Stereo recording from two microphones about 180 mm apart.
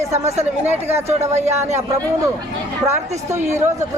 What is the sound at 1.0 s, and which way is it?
Speech, 35° right (ahead or behind).